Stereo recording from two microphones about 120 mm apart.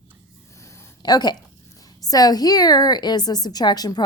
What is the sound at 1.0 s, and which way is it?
Speech, 35° left (ahead or behind).